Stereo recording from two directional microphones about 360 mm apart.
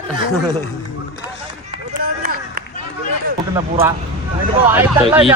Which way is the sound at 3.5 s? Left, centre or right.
Centre.